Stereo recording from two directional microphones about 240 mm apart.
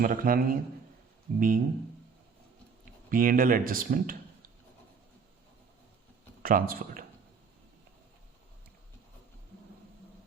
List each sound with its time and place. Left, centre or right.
0.0 s speech: right
3.1 s speech: right
6.4 s speech: right